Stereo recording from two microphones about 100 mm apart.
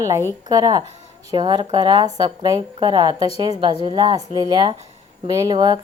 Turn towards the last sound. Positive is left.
turn(degrees=-45)  # may be behind; listen again after turning